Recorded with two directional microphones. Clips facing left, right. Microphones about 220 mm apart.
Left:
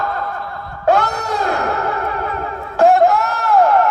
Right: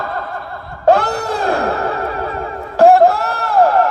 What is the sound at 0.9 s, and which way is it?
Wail, 30° right (ahead or behind).